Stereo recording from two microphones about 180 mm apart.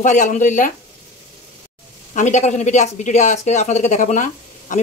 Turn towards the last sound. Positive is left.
turn(degrees=45)  # may be behind; listen again after turning